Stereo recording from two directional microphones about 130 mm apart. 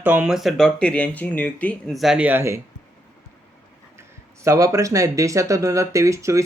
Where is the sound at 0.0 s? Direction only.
10° right (ahead or behind); by 1.7 s 10° left (ahead or behind).